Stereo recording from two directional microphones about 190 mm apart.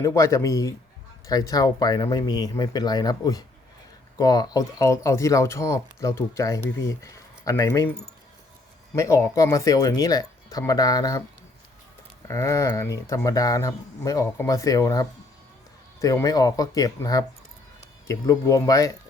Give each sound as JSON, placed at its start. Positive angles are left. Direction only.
{"t": 0.0, "sound": "speech", "side_deg": 15}
{"t": 9.0, "sound": "speech", "side_deg": 15}
{"t": 12.3, "sound": "speech", "side_deg": 15}